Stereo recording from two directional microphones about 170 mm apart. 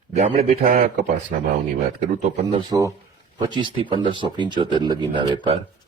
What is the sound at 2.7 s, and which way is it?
Speech, 20° right (ahead or behind).